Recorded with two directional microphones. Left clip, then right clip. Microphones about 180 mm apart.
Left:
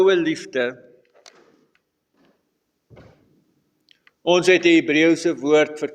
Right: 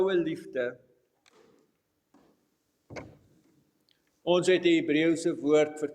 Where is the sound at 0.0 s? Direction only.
40° left (ahead or behind).